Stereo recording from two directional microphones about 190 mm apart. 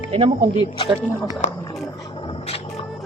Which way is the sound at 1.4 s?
40° left (ahead or behind).